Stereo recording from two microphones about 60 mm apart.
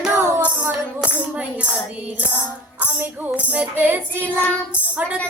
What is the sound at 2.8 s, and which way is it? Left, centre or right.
Speech, right.